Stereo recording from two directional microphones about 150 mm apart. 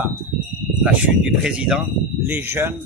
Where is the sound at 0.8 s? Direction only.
5° right (ahead or behind).